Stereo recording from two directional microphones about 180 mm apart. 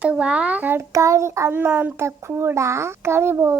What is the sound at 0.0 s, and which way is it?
A child's voice, 5° right (ahead or behind).